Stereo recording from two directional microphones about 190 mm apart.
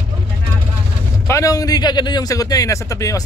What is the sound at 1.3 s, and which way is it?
A man's voice, 15° left (ahead or behind).